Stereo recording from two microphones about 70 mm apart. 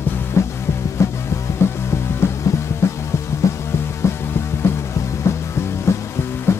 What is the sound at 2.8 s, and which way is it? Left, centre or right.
Music, left.